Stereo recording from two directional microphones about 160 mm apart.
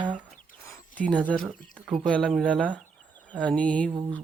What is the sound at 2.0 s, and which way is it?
Speech, 5° left (ahead or behind).